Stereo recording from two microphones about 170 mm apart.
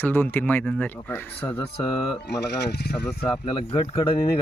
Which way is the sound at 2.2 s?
85° left.